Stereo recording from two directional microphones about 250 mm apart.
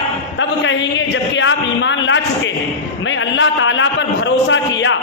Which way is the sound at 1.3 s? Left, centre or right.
Left.